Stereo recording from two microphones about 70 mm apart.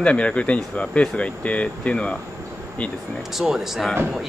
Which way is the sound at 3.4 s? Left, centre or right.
Centre.